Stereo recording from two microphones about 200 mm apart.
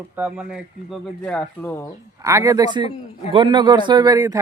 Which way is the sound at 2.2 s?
15° right (ahead or behind).